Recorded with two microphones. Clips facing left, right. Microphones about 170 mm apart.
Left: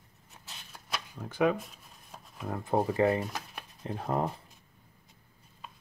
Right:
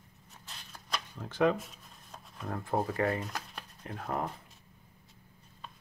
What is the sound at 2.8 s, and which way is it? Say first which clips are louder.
Speech: left 6 dB; 20° left (ahead or behind).